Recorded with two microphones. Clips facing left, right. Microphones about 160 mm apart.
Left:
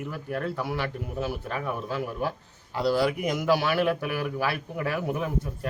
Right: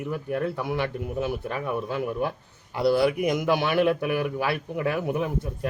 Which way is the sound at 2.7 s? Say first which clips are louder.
Right 3 dB; 15° right (ahead or behind).